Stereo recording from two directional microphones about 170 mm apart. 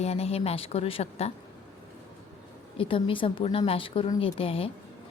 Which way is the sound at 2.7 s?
30° left (ahead or behind).